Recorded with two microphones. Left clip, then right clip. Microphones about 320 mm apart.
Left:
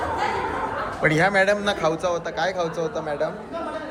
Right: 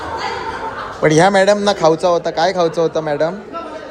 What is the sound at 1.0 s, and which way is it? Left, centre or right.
A man's voice, right.